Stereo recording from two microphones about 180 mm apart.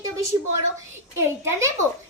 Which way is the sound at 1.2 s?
15° right (ahead or behind).